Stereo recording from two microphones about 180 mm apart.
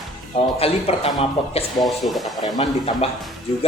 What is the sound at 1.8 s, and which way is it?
Speech, centre (ahead or behind).